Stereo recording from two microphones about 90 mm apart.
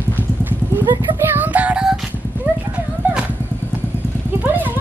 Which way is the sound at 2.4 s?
20° right (ahead or behind).